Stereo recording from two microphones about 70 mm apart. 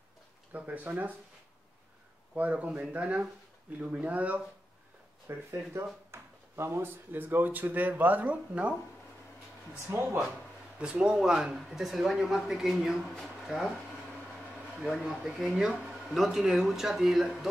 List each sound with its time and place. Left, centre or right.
0.5 s speech: right
2.3 s speech: right
5.3 s speech: right
9.9 s speech: right
10.8 s speech: centre
15.0 s speech: centre